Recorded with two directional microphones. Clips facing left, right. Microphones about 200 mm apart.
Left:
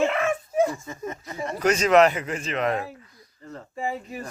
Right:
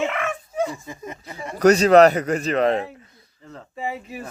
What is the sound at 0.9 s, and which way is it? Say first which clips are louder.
Speech: left 2 dB; 15° right (ahead or behind).